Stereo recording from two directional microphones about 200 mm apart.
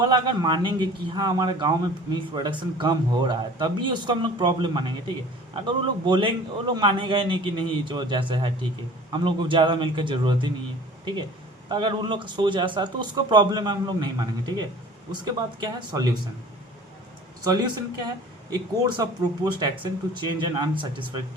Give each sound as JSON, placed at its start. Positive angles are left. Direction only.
{"t": 0.0, "sound": "a man's voice", "side_deg": -20}
{"t": 11.7, "sound": "a man's voice", "side_deg": -25}
{"t": 17.4, "sound": "a man's voice", "side_deg": -20}